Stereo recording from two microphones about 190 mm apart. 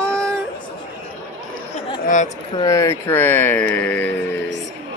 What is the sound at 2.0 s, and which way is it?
Speech, 40° left (ahead or behind).